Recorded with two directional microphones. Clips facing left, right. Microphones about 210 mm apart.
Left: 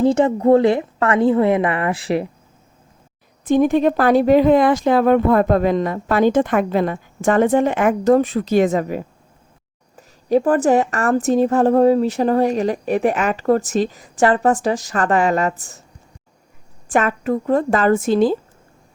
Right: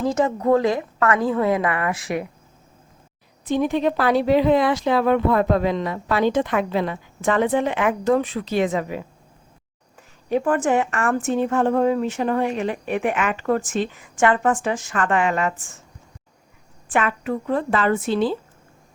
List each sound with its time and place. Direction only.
0.0 s a woman's voice: 30° left (ahead or behind)
3.4 s a woman's voice: 50° left (ahead or behind)
16.9 s speech: 40° left (ahead or behind)